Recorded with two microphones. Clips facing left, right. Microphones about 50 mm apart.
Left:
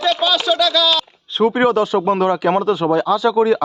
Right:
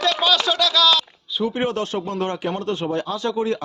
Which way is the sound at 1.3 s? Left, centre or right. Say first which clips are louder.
Left 8 dB; left.